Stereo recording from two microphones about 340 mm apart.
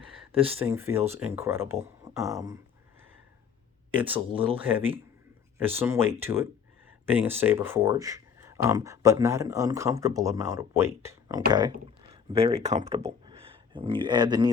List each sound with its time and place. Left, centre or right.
0.3 s speech: centre
3.9 s speech: centre
5.5 s speech: centre